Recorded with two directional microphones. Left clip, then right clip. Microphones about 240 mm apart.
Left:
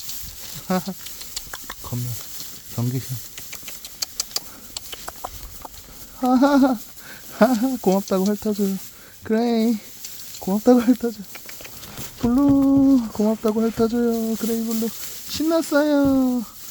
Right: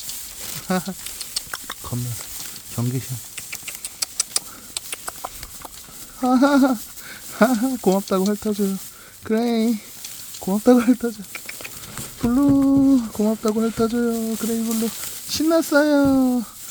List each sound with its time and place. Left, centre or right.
0.7 s patter: centre
2.7 s a sound: centre
6.1 s speech: centre